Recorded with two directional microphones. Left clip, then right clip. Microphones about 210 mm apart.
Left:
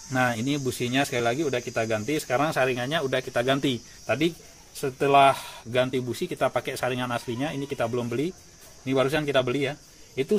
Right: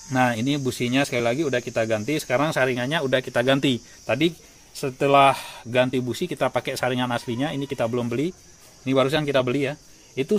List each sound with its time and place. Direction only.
0.1 s speech: 45° right (ahead or behind)